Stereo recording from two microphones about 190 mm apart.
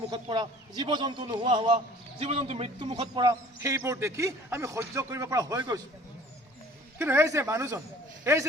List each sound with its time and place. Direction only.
0.1 s a man's voice: 20° right (ahead or behind)
3.2 s speech: 15° right (ahead or behind)
7.0 s a man's voice: 15° right (ahead or behind)